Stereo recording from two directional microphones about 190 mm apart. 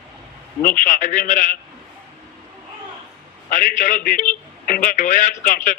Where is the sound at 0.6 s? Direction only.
45° left (ahead or behind).